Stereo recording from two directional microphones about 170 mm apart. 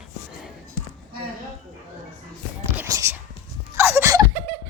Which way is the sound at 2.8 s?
15° right (ahead or behind).